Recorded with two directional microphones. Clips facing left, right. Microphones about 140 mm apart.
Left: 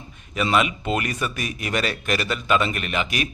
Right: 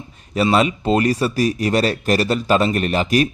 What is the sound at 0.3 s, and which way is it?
A man's voice, 35° right (ahead or behind).